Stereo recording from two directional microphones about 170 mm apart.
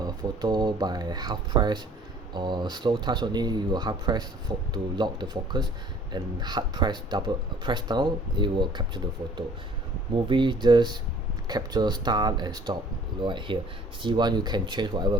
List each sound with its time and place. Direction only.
0.0 s speech: 25° right (ahead or behind)
10.2 s speech: 30° right (ahead or behind)